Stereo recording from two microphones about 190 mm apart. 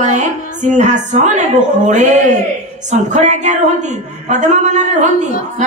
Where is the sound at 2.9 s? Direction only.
40° right (ahead or behind).